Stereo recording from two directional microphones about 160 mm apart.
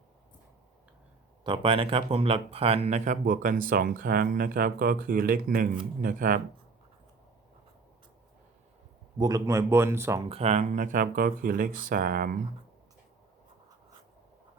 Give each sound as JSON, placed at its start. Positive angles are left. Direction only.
{"t": 1.5, "sound": "speech", "side_deg": -35}
{"t": 9.1, "sound": "speech", "side_deg": -20}
{"t": 10.2, "sound": "speech", "side_deg": -40}